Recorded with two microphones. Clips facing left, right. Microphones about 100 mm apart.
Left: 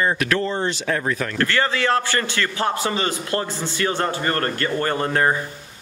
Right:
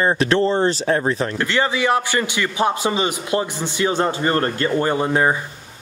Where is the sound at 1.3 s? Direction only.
15° right (ahead or behind).